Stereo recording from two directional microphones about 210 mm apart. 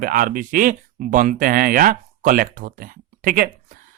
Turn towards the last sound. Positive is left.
turn(degrees=-45)  # may be behind; listen again after turning